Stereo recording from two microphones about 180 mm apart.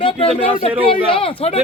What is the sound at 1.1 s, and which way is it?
Speech, 30° left (ahead or behind).